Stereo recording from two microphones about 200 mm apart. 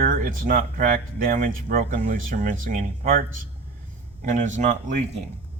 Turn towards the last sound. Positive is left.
turn(degrees=-35)  # may be behind; listen again after turning